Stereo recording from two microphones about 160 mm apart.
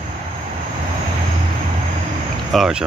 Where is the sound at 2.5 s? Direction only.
Centre (ahead or behind).